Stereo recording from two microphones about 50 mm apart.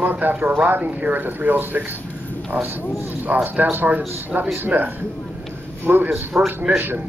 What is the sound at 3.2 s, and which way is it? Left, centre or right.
A man's voice, right.